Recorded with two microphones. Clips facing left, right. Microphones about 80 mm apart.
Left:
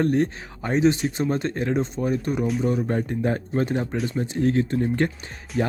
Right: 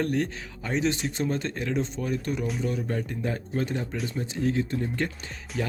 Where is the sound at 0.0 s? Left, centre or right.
Left.